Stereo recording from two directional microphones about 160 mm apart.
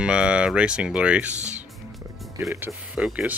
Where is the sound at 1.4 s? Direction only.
45° right (ahead or behind).